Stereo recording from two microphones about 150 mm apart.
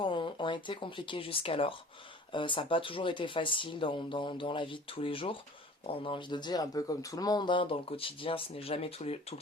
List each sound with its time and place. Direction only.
0.0 s speech: 30° left (ahead or behind)